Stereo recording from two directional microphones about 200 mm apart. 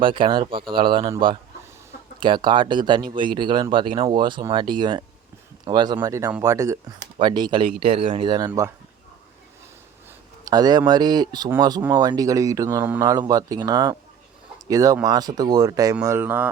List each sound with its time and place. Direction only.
0.0 s speech: 25° right (ahead or behind)
2.2 s speech: 25° right (ahead or behind)
10.4 s speech: 20° right (ahead or behind)